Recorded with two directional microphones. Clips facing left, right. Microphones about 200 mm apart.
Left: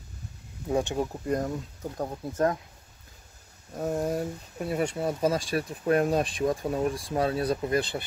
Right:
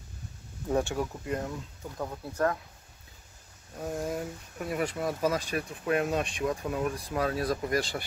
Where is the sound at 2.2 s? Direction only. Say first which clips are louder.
Left 3 dB; 20° left (ahead or behind).